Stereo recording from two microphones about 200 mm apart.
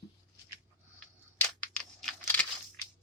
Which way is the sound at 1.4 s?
5° left (ahead or behind).